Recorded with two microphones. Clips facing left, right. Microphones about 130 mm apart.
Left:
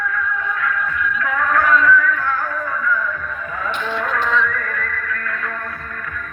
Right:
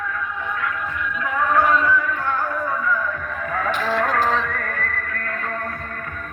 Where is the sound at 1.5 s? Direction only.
25° right (ahead or behind).